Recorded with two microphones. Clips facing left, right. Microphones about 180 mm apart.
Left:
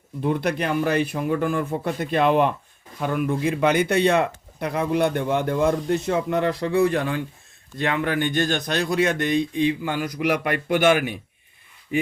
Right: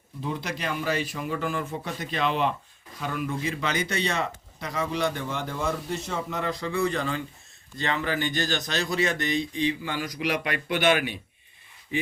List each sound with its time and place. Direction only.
0.2 s a man's voice: 60° left (ahead or behind)